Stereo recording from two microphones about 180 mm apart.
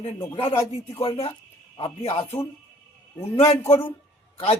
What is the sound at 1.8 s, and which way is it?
Speech, 30° left (ahead or behind).